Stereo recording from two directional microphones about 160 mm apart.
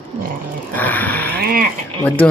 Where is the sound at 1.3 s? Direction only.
75° right (ahead or behind).